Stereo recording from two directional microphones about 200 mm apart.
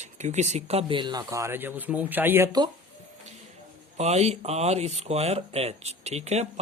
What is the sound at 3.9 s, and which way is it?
Speech, 35° right (ahead or behind).